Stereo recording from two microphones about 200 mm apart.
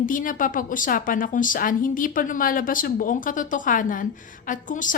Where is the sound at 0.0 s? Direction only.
40° left (ahead or behind).